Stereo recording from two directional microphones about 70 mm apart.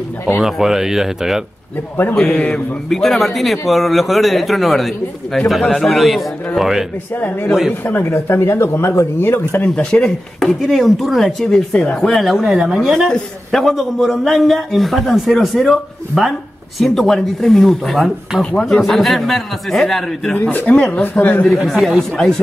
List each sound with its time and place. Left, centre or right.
0.4 s speech: centre
2.3 s speech: centre
2.9 s speech: centre
7.2 s speech: left
9.5 s speech: centre
10.4 s speech: centre
11.7 s speech: centre
12.0 s speech: centre
18.4 s speech: centre
20.3 s speech: left
21.0 s speech: left